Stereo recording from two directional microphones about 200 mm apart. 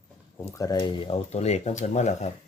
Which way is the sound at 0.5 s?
15° left (ahead or behind).